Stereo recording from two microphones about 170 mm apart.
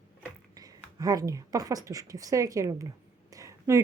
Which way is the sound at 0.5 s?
20° right (ahead or behind).